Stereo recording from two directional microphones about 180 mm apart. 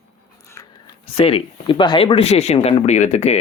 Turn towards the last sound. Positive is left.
turn(degrees=40)  # may be behind; listen again after turning